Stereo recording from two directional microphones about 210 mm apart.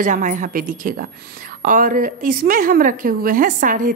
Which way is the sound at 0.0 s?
40° right (ahead or behind).